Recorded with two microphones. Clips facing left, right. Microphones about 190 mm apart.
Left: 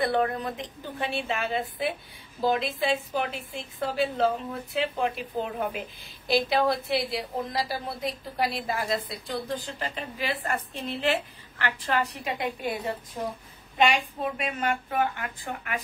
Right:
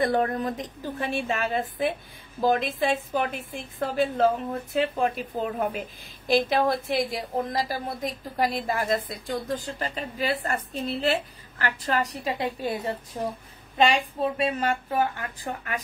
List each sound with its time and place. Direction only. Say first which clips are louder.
0.0 s a woman's voice: right 2 dB; 40° right (ahead or behind)